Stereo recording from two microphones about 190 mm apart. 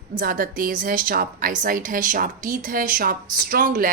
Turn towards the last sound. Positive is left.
turn(degrees=-45)  # may be behind; listen again after turning